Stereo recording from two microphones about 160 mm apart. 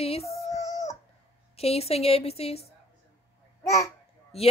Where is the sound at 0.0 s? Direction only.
40° left (ahead or behind).